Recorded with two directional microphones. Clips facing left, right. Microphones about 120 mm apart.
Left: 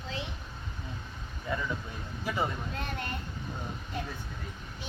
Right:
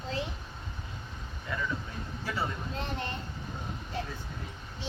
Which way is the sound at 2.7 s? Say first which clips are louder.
Right 1 dB; 25° right (ahead or behind).